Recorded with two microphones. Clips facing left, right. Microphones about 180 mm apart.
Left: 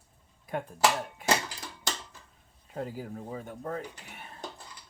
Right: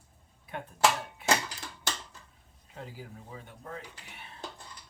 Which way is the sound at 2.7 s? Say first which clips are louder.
Left 8 dB; 45° left (ahead or behind).